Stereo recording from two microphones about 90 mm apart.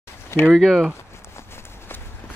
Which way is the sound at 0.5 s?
5° left (ahead or behind).